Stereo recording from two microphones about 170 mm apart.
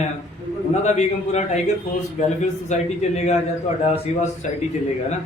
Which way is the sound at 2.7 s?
40° left (ahead or behind).